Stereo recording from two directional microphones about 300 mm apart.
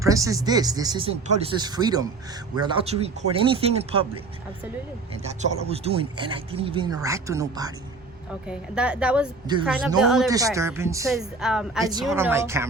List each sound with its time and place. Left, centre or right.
0.0 s speech: centre
5.1 s a woman's voice: right